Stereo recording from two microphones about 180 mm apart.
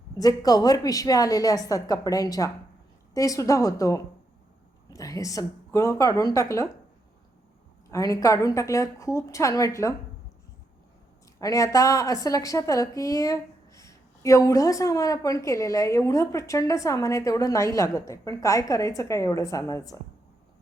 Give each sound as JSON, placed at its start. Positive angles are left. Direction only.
{"t": 0.2, "sound": "a woman's voice", "side_deg": 20}
{"t": 7.9, "sound": "a woman's voice", "side_deg": 15}
{"t": 11.3, "sound": "a woman's voice", "side_deg": 20}